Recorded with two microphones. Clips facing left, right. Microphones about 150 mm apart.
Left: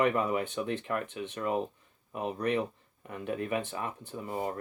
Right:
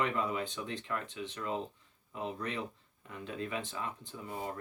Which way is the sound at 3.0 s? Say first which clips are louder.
Left 6 dB; 60° left (ahead or behind).